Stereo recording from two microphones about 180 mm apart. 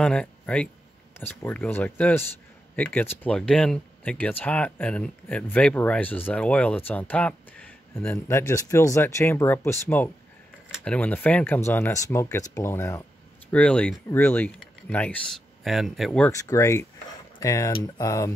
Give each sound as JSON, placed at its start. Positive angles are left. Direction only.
{"t": 0.0, "sound": "speech", "side_deg": 5}
{"t": 16.3, "sound": "speech", "side_deg": 15}